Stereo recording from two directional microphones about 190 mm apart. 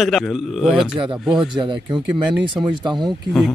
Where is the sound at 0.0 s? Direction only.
Centre (ahead or behind).